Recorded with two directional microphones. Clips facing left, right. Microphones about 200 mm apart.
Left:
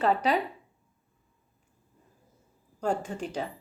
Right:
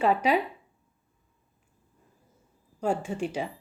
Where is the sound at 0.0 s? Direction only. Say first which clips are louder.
Right 2 dB; 10° right (ahead or behind).